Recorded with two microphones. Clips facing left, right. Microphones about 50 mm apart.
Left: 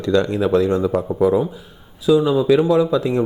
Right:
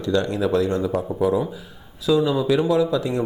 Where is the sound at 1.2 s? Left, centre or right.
Left.